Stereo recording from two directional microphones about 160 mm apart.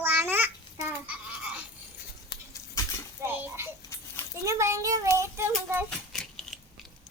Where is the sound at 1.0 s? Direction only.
10° right (ahead or behind).